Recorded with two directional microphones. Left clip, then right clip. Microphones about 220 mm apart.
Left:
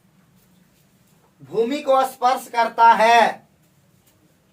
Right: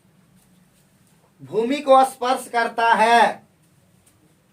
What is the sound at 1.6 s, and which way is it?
Speech, 40° right (ahead or behind).